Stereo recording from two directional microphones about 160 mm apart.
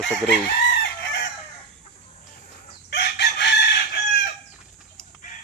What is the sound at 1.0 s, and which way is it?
Chicken, 90° left.